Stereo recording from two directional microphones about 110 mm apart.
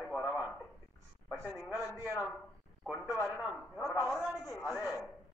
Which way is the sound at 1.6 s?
Centre (ahead or behind).